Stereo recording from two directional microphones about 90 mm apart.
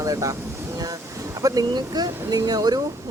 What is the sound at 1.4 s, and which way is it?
A man's voice, 40° right (ahead or behind).